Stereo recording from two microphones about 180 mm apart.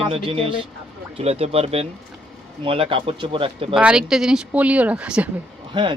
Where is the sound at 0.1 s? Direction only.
30° right (ahead or behind).